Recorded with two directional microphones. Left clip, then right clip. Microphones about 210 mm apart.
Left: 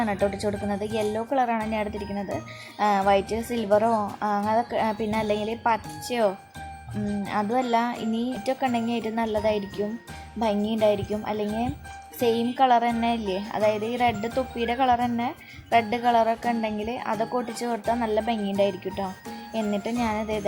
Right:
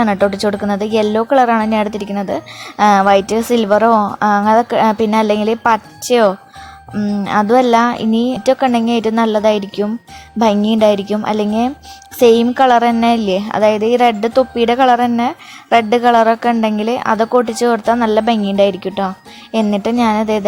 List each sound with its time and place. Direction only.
0.0 s a woman's voice: 30° right (ahead or behind)